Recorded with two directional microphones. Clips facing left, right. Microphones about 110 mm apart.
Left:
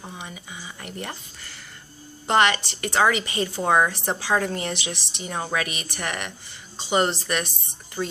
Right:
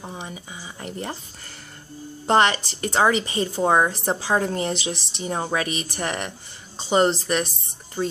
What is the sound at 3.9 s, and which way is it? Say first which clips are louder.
A woman's voice: right 1 dB; 35° right (ahead or behind).